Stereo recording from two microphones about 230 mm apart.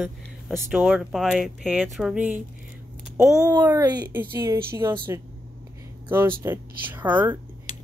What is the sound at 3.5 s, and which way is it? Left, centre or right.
Speech, centre.